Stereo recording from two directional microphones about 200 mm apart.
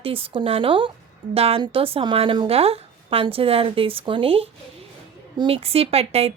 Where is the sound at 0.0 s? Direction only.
25° right (ahead or behind).